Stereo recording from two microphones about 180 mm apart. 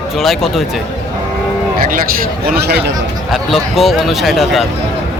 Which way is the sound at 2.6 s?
65° right (ahead or behind).